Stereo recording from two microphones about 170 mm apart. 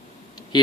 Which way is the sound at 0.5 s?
25° left (ahead or behind).